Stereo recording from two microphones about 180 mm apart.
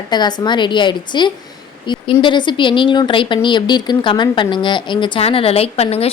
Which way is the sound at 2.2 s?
25° left (ahead or behind).